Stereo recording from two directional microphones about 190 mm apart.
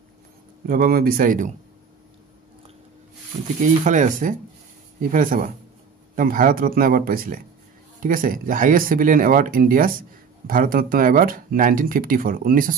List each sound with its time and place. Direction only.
0.7 s speech: 50° right (ahead or behind)
3.6 s speech: 40° right (ahead or behind)